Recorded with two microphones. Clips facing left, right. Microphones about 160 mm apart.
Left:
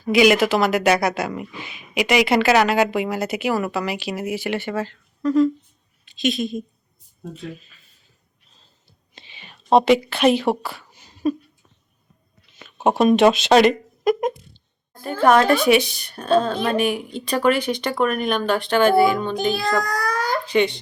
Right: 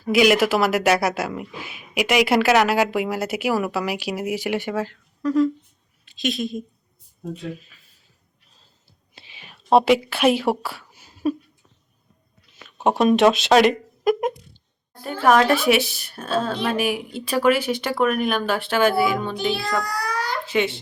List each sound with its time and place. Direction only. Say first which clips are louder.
0.0 s speech: left 1 dB; 5° right (ahead or behind)
9.1 s whispering: left 1 dB; 5° right (ahead or behind)
12.5 s speech: left 1 dB; centre (ahead or behind)
19.8 s a sound: left 3 dB; 45° left (ahead or behind)
20.5 s speech: left 3 dB; 5° right (ahead or behind)